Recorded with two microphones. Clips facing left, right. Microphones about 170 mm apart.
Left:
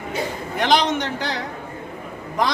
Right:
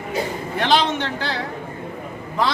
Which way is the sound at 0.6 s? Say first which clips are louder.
Left 1 dB; 15° left (ahead or behind).